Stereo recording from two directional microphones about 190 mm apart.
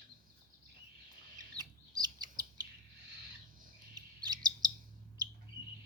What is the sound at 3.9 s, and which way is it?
Chirp, 20° right (ahead or behind).